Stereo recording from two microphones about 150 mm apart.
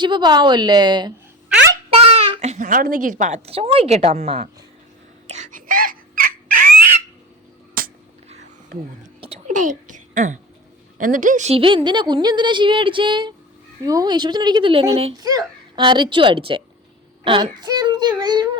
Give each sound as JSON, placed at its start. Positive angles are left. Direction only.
{"t": 0.0, "sound": "a woman's voice", "side_deg": -30}
{"t": 1.9, "sound": "a child's voice", "side_deg": -40}
{"t": 5.3, "sound": "bird", "side_deg": -55}
{"t": 9.5, "sound": "a child's voice", "side_deg": -60}
{"t": 15.1, "sound": "a woman's voice", "side_deg": -25}